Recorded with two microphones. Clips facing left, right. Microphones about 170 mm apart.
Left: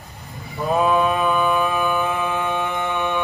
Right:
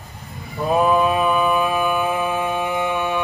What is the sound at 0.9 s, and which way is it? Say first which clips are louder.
Mantra: right 1 dB; centre (ahead or behind).